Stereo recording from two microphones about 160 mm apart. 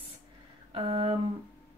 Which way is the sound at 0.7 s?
40° right (ahead or behind).